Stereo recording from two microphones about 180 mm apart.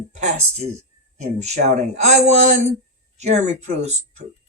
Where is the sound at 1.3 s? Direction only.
40° right (ahead or behind).